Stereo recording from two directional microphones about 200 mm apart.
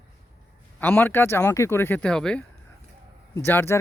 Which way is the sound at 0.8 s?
10° left (ahead or behind).